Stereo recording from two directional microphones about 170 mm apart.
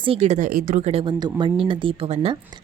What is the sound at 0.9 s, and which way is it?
A woman's voice, 30° right (ahead or behind).